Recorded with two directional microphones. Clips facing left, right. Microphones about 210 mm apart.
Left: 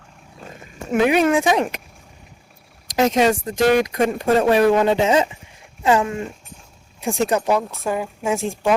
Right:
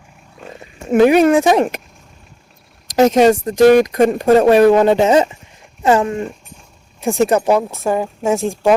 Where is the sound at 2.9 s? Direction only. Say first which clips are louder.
Right 6 dB; 45° right (ahead or behind).